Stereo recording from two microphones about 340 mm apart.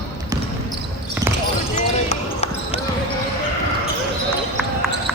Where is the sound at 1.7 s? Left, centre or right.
Centre.